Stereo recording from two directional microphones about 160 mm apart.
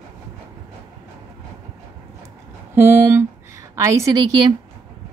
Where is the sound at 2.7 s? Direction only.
15° right (ahead or behind).